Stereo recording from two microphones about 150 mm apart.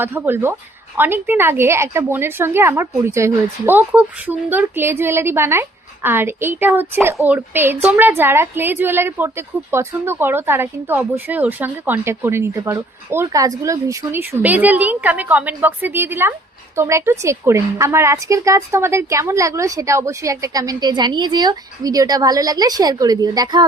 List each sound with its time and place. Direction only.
0.0 s a woman's voice: 15° right (ahead or behind)